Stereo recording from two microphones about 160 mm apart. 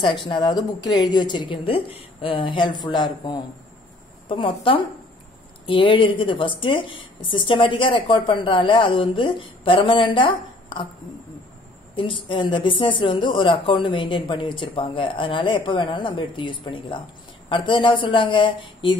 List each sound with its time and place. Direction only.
0.3 s a woman's voice: 25° left (ahead or behind)
11.9 s a woman's voice: 30° left (ahead or behind)